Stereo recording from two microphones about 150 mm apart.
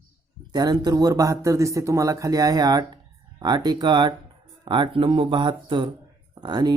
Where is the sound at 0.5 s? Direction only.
30° right (ahead or behind).